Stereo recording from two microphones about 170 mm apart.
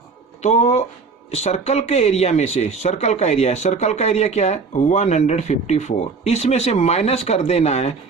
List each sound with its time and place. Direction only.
0.4 s speech: 40° left (ahead or behind)